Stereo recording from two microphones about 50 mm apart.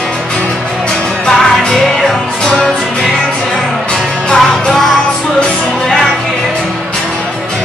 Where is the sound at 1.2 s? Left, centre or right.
Centre.